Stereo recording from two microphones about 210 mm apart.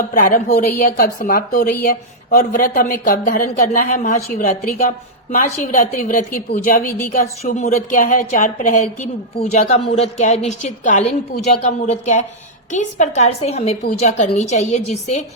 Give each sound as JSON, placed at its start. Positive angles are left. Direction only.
{"t": 0.1, "sound": "a woman's voice", "side_deg": 40}